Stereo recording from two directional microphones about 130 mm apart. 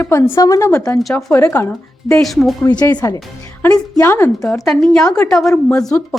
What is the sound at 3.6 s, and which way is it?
Speech, 20° left (ahead or behind).